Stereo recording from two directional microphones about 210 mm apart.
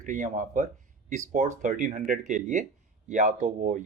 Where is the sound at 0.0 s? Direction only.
35° right (ahead or behind).